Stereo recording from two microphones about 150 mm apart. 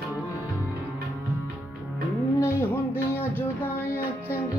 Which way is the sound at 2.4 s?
15° left (ahead or behind).